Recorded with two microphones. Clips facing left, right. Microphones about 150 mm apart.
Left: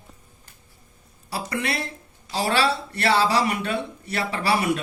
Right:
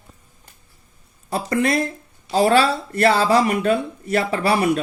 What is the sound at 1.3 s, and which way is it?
Speech, 40° right (ahead or behind).